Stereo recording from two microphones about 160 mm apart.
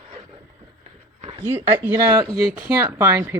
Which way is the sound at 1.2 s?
35° right (ahead or behind).